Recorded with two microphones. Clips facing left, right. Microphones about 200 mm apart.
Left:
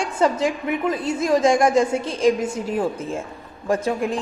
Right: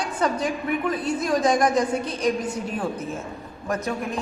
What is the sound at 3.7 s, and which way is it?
Speech, 30° left (ahead or behind).